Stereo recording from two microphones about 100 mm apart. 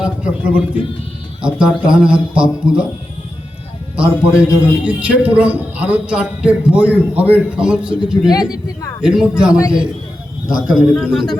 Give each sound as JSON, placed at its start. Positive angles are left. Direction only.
{"t": 0.0, "sound": "speech", "side_deg": -10}
{"t": 3.9, "sound": "speech", "side_deg": -10}
{"t": 8.3, "sound": "speech", "side_deg": 40}
{"t": 9.0, "sound": "a man's voice", "side_deg": -5}